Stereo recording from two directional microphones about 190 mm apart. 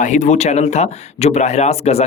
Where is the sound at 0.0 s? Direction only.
40° left (ahead or behind).